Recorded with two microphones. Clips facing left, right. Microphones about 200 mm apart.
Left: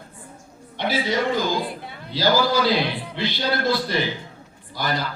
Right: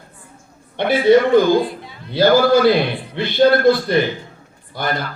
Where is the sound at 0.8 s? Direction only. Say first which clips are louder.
Right 11 dB; 55° right (ahead or behind).